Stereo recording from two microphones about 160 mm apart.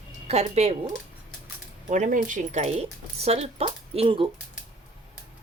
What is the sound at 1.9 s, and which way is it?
Speech, 50° right (ahead or behind).